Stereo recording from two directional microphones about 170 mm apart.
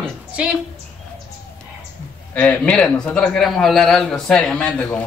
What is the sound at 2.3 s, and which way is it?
A man's voice, 10° left (ahead or behind).